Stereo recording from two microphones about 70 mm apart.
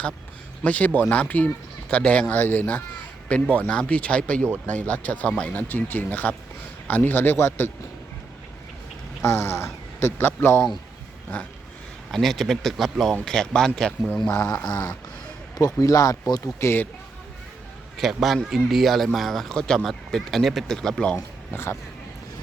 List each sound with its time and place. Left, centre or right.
0.6 s speech: left
9.2 s speech: left
12.1 s speech: centre
14.3 s mantra: left
14.7 s dog: left
15.8 s speech: left
16.6 s speech: left
17.9 s a man's voice: centre
21.5 s speech: left